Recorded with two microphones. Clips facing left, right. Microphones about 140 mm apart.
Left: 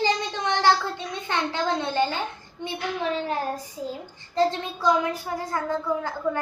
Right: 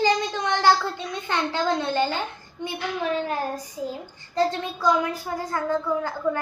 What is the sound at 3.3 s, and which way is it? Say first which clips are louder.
A child's voice: even; 25° left (ahead or behind).